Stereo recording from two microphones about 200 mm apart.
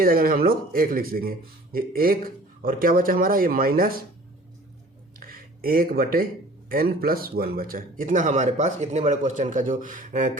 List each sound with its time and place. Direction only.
0.0 s speech: 45° right (ahead or behind)
5.2 s a sound: 45° right (ahead or behind)
6.7 s speech: 45° right (ahead or behind)